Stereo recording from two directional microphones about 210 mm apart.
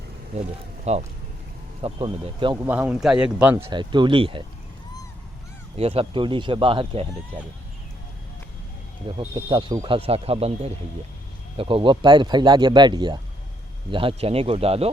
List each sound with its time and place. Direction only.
0.9 s speech: 30° right (ahead or behind)
2.6 s speech: 5° right (ahead or behind)
3.6 s speech: 20° right (ahead or behind)
5.7 s speech: 30° right (ahead or behind)
9.1 s speech: 25° right (ahead or behind)